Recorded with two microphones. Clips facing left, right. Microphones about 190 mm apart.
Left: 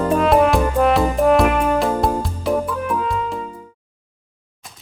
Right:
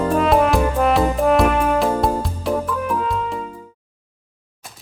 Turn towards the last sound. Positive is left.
turn(degrees=0)  # may be behind; listen again after turning